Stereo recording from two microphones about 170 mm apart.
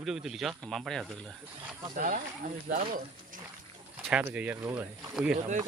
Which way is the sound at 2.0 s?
50° right (ahead or behind).